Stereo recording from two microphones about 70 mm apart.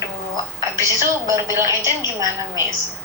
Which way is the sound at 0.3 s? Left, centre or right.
Right.